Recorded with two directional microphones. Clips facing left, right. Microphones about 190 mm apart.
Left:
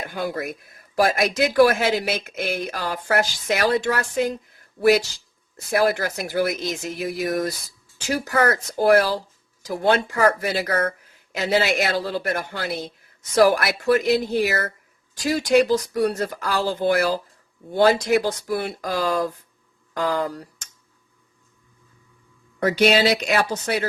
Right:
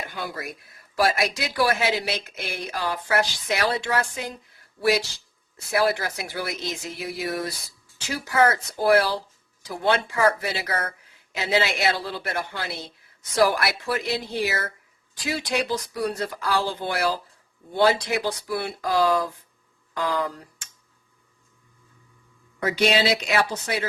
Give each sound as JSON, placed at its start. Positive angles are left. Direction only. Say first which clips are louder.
{"t": 0.0, "sound": "speech", "louder": "left 6 dB", "side_deg": 50}
{"t": 5.5, "sound": "speech", "louder": "left 3 dB", "side_deg": 45}
{"t": 22.6, "sound": "speech", "louder": "left 4 dB", "side_deg": 45}